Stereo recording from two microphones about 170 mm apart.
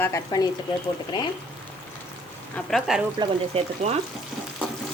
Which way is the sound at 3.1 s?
35° right (ahead or behind).